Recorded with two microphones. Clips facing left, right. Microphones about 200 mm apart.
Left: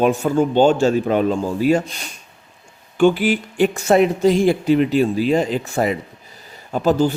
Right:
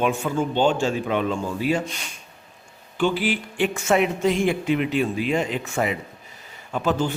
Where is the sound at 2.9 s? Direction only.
50° left (ahead or behind).